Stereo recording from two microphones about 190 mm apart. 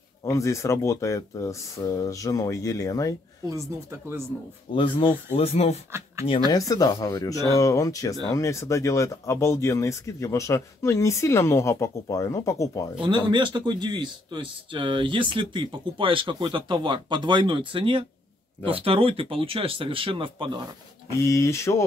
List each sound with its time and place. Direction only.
0.2 s speech: 15° left (ahead or behind)
3.4 s speech: 15° right (ahead or behind)
4.7 s speech: 25° left (ahead or behind)
5.9 s speech: 15° right (ahead or behind)
6.5 s speech: 20° left (ahead or behind)
13.0 s a man's voice: 25° right (ahead or behind)
21.2 s speech: 15° left (ahead or behind)